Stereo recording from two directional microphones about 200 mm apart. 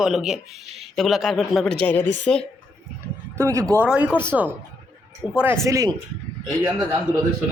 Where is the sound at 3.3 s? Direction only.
15° right (ahead or behind).